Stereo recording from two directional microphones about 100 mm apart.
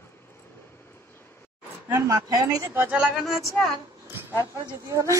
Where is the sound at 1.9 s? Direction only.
40° right (ahead or behind).